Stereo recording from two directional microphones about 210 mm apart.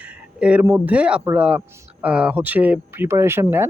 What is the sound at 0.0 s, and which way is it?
Speech, 5° right (ahead or behind).